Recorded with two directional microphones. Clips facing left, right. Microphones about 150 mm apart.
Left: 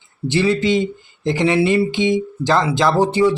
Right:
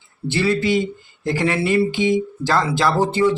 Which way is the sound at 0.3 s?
20° left (ahead or behind).